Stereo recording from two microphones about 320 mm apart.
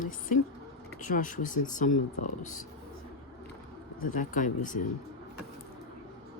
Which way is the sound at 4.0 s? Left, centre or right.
Left.